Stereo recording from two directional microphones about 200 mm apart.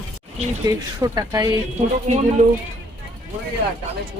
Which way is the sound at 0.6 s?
20° right (ahead or behind).